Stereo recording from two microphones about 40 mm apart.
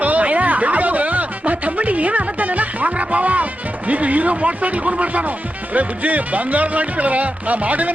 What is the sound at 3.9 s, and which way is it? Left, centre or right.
Speech, right.